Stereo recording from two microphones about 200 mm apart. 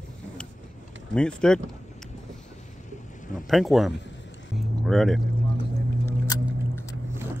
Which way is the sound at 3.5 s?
Centre (ahead or behind).